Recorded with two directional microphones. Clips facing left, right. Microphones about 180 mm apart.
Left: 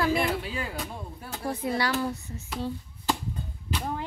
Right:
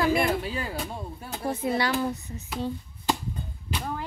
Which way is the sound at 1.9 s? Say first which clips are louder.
Right 1 dB; 15° right (ahead or behind).